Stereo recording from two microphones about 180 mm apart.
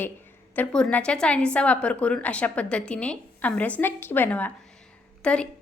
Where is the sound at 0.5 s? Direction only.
5° left (ahead or behind).